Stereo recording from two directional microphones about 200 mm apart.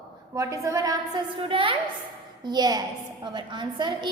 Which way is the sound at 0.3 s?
15° right (ahead or behind).